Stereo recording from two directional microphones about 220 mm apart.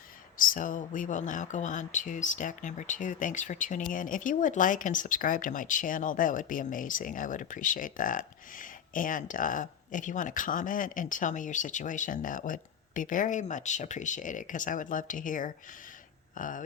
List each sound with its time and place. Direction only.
0.3 s speech: 40° left (ahead or behind)